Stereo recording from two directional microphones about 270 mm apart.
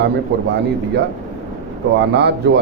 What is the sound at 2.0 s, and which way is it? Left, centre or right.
Speech, right.